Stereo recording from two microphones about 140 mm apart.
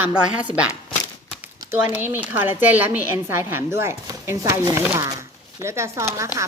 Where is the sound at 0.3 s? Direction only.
10° right (ahead or behind).